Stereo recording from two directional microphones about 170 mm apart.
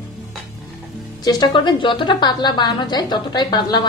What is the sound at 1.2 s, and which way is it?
A woman's voice, 25° left (ahead or behind).